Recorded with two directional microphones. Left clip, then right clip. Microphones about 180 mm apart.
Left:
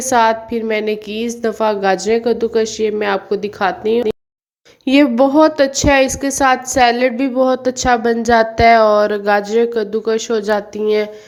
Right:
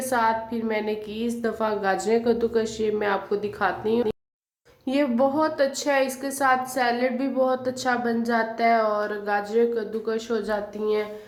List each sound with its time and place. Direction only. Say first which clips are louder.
0.0 s a woman's voice: left 10 dB; 40° left (ahead or behind)